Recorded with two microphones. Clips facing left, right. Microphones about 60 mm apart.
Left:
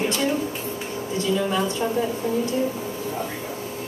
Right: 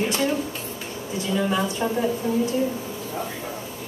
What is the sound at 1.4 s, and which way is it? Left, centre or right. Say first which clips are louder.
Speech: even; centre.